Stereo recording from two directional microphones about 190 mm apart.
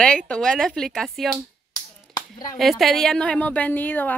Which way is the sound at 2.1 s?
20° left (ahead or behind).